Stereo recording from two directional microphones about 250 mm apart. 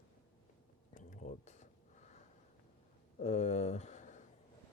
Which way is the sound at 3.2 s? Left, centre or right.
Left.